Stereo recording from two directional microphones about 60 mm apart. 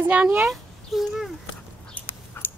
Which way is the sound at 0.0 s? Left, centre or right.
Right.